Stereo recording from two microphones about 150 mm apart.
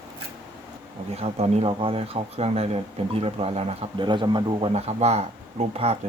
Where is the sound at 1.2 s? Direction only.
45° right (ahead or behind).